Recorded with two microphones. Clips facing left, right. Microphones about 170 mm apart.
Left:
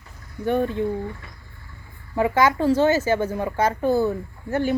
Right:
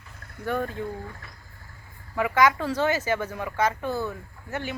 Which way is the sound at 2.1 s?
30° left (ahead or behind).